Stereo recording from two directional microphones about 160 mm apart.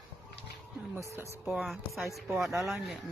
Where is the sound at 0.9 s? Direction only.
15° right (ahead or behind).